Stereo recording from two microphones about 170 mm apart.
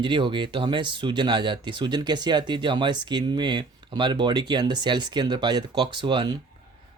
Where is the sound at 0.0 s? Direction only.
30° right (ahead or behind).